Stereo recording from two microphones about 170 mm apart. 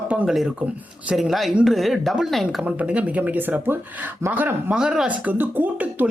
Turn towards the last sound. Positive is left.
turn(degrees=-10)  # may be behind; listen again after turning